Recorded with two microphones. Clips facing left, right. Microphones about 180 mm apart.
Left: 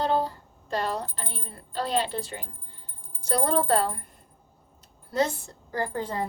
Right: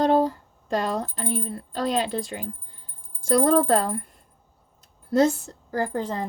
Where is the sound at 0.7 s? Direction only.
45° right (ahead or behind).